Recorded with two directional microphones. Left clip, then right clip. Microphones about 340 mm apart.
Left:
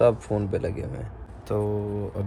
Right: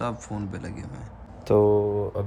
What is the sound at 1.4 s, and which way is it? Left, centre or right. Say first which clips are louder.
Speech: right 8 dB; right.